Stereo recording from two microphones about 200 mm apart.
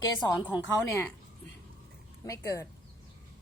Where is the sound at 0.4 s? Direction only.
10° left (ahead or behind).